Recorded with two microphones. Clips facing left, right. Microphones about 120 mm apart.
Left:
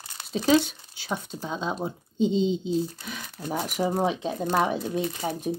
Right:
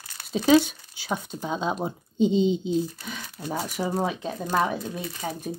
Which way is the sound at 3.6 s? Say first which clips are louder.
Left 2 dB; 15° left (ahead or behind).